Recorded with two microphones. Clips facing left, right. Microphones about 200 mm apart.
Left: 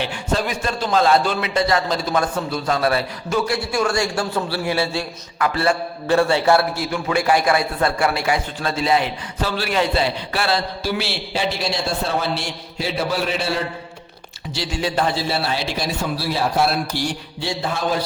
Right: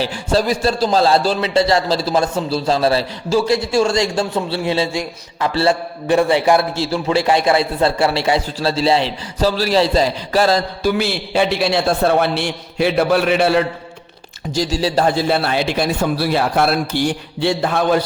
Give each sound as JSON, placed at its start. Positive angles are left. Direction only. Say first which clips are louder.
{"t": 0.0, "sound": "a man's voice", "louder": "right 5 dB", "side_deg": -35}
{"t": 6.1, "sound": "a man's voice", "louder": "right 2 dB", "side_deg": -15}
{"t": 14.5, "sound": "speech", "louder": "right 5 dB", "side_deg": -40}
{"t": 15.0, "sound": "a man's voice", "louder": "right 5 dB", "side_deg": -55}